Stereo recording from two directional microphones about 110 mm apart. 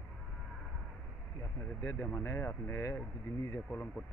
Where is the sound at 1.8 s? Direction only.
30° left (ahead or behind).